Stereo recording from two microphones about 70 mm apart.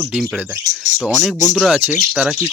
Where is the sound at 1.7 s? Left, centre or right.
Right.